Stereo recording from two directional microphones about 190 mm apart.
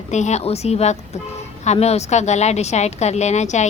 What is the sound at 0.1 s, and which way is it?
A woman's voice, 35° left (ahead or behind).